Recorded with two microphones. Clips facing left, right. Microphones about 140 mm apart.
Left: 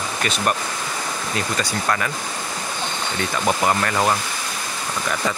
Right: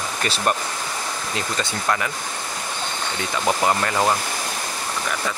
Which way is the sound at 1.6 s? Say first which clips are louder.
Right 1 dB; 15° right (ahead or behind).